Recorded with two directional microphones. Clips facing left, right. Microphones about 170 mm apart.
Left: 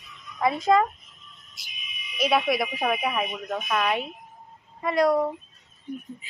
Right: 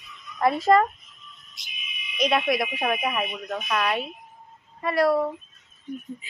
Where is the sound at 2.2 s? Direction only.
5° left (ahead or behind); by 5.3 s 20° left (ahead or behind).